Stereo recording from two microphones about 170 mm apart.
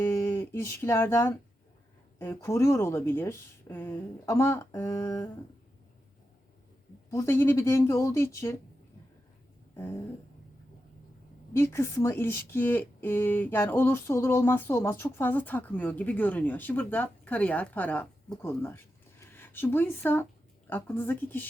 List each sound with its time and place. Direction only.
0.0 s speech: 15° left (ahead or behind)
4.9 s a sound: 20° left (ahead or behind)
7.1 s speech: 15° left (ahead or behind)
11.5 s speech: 15° left (ahead or behind)